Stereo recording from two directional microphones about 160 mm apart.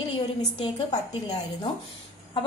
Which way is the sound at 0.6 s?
30° left (ahead or behind).